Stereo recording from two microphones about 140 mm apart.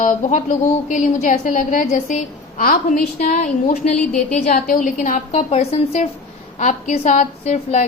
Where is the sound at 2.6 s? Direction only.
90° left.